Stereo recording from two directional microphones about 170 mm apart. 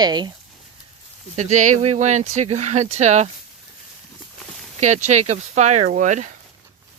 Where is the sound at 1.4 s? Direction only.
45° right (ahead or behind).